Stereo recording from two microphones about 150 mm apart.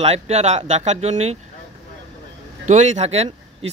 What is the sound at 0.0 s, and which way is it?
Speech, 45° right (ahead or behind).